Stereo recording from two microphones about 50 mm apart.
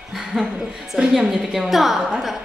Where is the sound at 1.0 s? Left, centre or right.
Centre.